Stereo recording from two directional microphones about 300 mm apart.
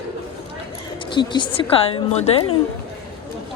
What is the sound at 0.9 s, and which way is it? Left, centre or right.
A woman's voice, centre.